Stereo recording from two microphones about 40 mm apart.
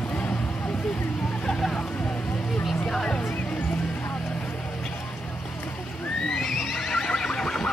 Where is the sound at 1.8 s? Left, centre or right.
Left.